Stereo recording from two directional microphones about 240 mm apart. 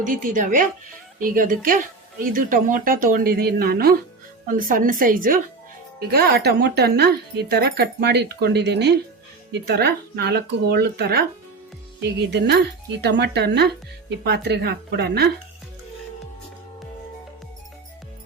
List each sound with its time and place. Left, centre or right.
0.0 s speech: right